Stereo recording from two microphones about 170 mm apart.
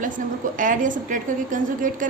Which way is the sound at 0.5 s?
50° right (ahead or behind).